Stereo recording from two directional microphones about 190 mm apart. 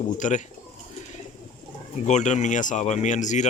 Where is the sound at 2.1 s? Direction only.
40° left (ahead or behind).